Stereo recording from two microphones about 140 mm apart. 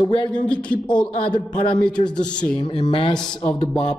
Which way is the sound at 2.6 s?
35° left (ahead or behind).